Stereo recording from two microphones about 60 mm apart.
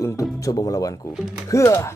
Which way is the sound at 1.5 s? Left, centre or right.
Left.